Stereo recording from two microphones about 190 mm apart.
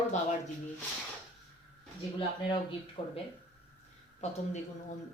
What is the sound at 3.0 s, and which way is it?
Speech, 30° left (ahead or behind).